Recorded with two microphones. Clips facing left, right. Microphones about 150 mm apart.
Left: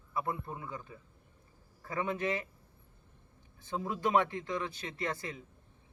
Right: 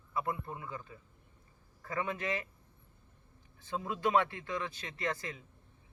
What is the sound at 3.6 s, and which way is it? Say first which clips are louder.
A man's voice: left 1 dB; 15° left (ahead or behind).